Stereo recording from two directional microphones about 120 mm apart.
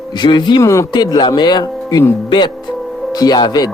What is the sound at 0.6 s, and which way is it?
Speech, 25° left (ahead or behind).